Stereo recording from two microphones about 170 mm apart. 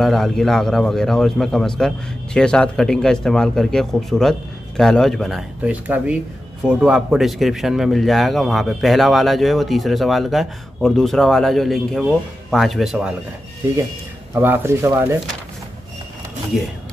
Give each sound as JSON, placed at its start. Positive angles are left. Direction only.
{"t": 0.0, "sound": "speech", "side_deg": 0}
{"t": 5.6, "sound": "speech", "side_deg": -10}
{"t": 14.3, "sound": "speech", "side_deg": -15}
{"t": 16.5, "sound": "speech", "side_deg": 0}